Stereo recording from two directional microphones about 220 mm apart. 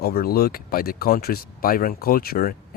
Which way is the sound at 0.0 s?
45° left (ahead or behind).